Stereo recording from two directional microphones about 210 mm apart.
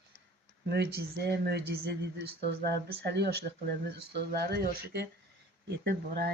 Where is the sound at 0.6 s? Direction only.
50° right (ahead or behind).